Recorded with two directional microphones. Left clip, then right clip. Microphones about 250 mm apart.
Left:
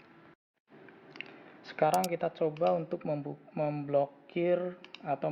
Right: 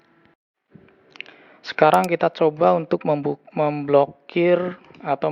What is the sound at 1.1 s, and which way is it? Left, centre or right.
Speech, right.